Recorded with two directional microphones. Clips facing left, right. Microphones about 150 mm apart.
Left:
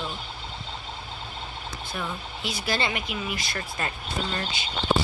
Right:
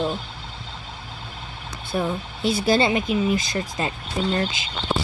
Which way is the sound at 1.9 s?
30° right (ahead or behind).